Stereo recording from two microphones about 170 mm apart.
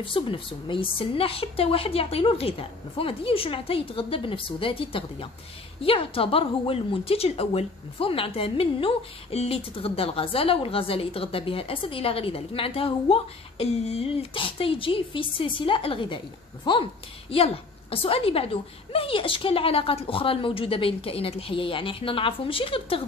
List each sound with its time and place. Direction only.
0.0 s a woman's voice: 30° left (ahead or behind)